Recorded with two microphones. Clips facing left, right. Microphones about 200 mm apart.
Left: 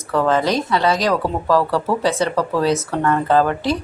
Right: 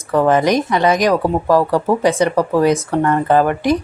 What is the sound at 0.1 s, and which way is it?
Speech, 15° right (ahead or behind).